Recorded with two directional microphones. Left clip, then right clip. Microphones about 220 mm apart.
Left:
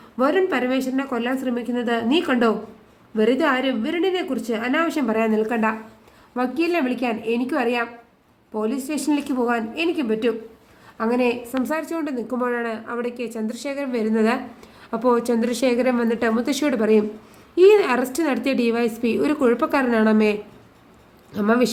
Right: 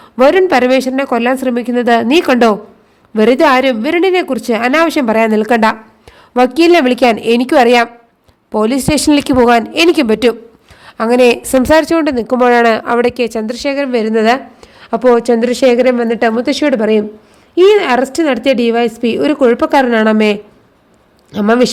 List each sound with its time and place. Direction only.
0.2 s a woman's voice: 40° right (ahead or behind)